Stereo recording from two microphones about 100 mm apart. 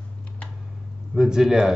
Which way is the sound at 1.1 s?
5° right (ahead or behind).